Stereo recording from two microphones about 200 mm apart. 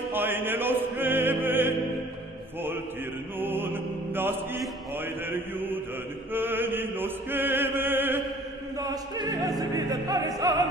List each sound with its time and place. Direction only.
0.1 s music: 10° right (ahead or behind)
3.3 s music: 10° right (ahead or behind)
4.6 s chant: 10° right (ahead or behind)
8.7 s music: 20° right (ahead or behind)